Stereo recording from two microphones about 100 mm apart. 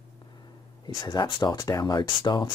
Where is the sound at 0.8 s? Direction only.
45° left (ahead or behind).